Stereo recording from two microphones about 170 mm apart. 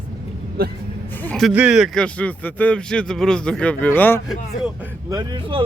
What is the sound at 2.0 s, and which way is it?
A man's voice, 10° left (ahead or behind).